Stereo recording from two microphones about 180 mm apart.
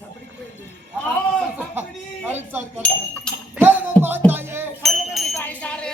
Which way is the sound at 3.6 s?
10° right (ahead or behind).